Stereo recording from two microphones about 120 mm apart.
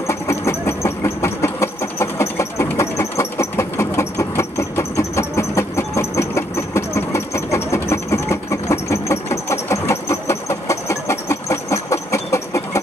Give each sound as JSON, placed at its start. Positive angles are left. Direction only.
{"t": 0.0, "sound": "vehicle", "side_deg": 25}